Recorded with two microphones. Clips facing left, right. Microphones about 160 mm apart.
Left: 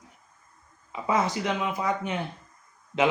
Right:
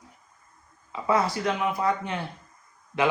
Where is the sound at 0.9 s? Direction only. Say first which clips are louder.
Right 1 dB; 20° left (ahead or behind).